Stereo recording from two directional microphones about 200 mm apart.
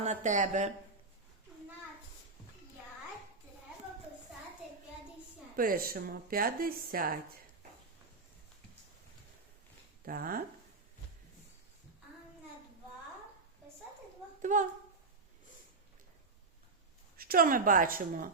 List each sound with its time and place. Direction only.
0.0 s speech: 35° right (ahead or behind)
5.5 s speech: 45° right (ahead or behind)
10.1 s speech: 45° right (ahead or behind)
14.4 s speech: 40° right (ahead or behind)
17.2 s speech: 45° right (ahead or behind)